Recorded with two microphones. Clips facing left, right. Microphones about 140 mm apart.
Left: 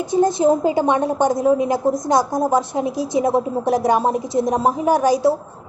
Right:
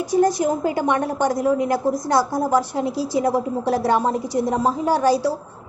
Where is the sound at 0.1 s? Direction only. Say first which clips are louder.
Left 3 dB; 25° left (ahead or behind).